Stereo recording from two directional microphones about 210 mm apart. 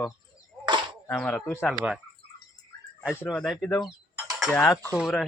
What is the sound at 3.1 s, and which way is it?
Cutlery, 5° left (ahead or behind).